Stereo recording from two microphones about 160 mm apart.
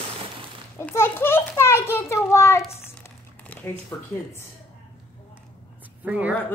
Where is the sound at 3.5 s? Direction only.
10° left (ahead or behind).